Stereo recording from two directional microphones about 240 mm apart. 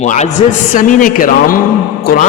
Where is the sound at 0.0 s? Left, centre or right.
Left.